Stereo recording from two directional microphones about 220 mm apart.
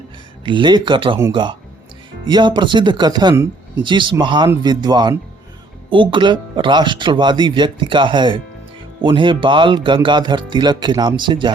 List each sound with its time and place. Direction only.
0.4 s speech: 20° right (ahead or behind)